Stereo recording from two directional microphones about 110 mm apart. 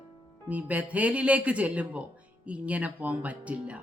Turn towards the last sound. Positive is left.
turn(degrees=-10)  # may be behind; listen again after turning